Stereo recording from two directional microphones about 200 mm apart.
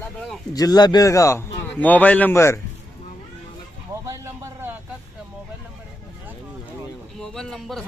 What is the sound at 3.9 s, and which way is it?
Vehicle, 15° right (ahead or behind).